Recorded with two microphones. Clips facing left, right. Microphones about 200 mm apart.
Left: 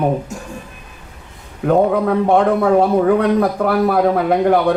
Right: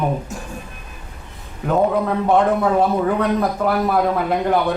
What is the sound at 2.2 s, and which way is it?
A man's voice, 60° left (ahead or behind).